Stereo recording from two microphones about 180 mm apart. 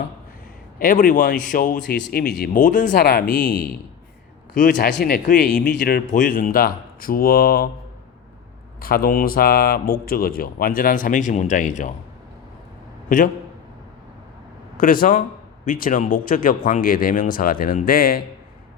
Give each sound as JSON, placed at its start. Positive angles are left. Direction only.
{"t": 0.8, "sound": "speech", "side_deg": 50}
{"t": 2.1, "sound": "speech", "side_deg": 60}
{"t": 2.6, "sound": "speech", "side_deg": 45}
{"t": 3.2, "sound": "speech", "side_deg": 5}
{"t": 4.8, "sound": "speech", "side_deg": 55}
{"t": 5.7, "sound": "speech", "side_deg": 65}
{"t": 6.1, "sound": "speech", "side_deg": 50}
{"t": 8.8, "sound": "speech", "side_deg": 55}
{"t": 13.1, "sound": "a man's voice", "side_deg": 50}
{"t": 14.8, "sound": "speech", "side_deg": 50}